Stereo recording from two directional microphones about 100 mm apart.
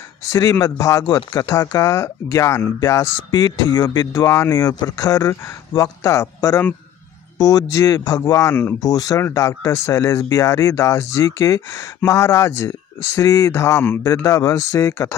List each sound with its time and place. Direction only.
0.3 s speech: 35° left (ahead or behind)
3.3 s speech: 40° left (ahead or behind)